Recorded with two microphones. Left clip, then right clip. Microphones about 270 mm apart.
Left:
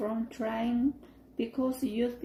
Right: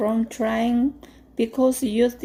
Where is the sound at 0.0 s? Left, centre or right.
Right.